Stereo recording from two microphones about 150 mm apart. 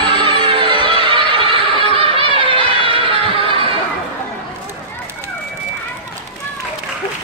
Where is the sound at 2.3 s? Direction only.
35° right (ahead or behind).